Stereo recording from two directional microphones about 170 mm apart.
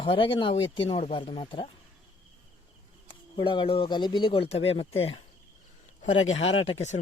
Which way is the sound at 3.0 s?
30° left (ahead or behind).